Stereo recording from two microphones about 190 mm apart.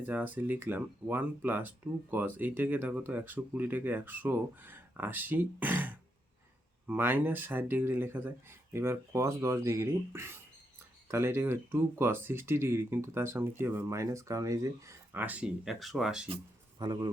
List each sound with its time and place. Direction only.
0.0 s speech: 10° right (ahead or behind)
16.3 s speech: 25° right (ahead or behind)